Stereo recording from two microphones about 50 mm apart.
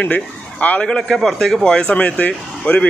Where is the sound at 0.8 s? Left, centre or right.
Centre.